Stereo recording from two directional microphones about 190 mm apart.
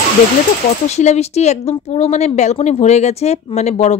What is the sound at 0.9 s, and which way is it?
Speech, 35° left (ahead or behind).